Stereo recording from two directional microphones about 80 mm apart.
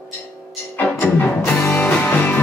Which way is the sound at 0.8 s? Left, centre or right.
Left.